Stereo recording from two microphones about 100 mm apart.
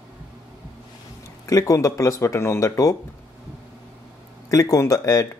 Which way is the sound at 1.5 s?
30° left (ahead or behind).